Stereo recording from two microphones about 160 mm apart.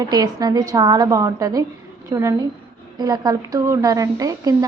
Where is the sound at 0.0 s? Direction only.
25° right (ahead or behind).